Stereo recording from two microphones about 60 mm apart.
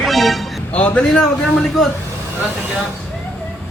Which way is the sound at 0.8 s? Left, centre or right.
Left.